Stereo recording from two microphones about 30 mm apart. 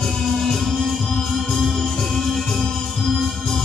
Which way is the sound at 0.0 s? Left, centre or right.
Centre.